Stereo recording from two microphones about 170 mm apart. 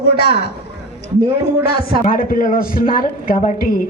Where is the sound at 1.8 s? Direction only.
55° left (ahead or behind).